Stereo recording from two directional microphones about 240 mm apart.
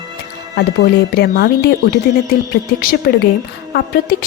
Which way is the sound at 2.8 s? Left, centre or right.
Left.